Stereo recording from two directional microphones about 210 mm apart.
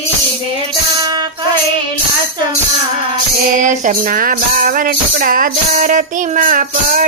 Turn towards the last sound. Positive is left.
turn(degrees=-40)  # may be behind; listen again after turning